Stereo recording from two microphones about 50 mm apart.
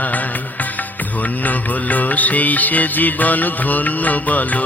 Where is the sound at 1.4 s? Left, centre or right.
Left.